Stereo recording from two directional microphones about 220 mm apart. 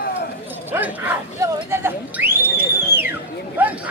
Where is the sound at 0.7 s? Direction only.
10° right (ahead or behind).